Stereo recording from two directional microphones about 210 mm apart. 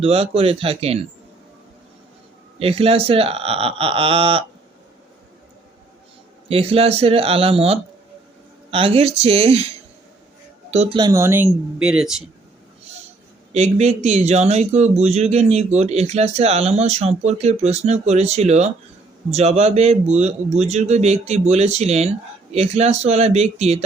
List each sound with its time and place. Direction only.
0.0 s speech: 30° right (ahead or behind)
2.6 s speech: 25° right (ahead or behind)
6.5 s speech: 25° right (ahead or behind); by 12.1 s 5° right (ahead or behind)
13.5 s speech: 30° right (ahead or behind)